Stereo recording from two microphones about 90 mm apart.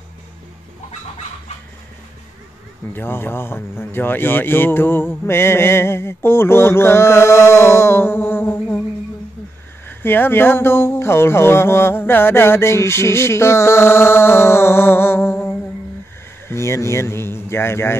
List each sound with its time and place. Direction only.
2.9 s speech: 25° left (ahead or behind)
9.8 s speech: 25° left (ahead or behind)